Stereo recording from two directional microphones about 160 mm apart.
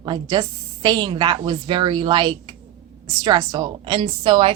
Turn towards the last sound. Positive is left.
turn(degrees=-30)  # may be behind; listen again after turning